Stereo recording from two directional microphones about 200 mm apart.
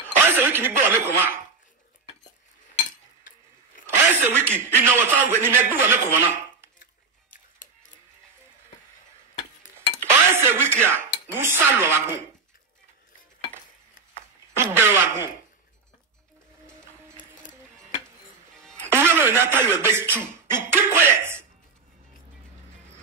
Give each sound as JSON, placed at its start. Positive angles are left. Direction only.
{"t": 0.0, "sound": "speech", "side_deg": -10}
{"t": 2.9, "sound": "a sound", "side_deg": 40}
{"t": 3.8, "sound": "a man's voice", "side_deg": -10}
{"t": 6.8, "sound": "music", "side_deg": 40}
{"t": 10.0, "sound": "a sound", "side_deg": -10}
{"t": 11.3, "sound": "a man's voice", "side_deg": -10}
{"t": 14.5, "sound": "a man's voice", "side_deg": -10}
{"t": 18.6, "sound": "music", "side_deg": 5}
{"t": 18.9, "sound": "a man's voice", "side_deg": -10}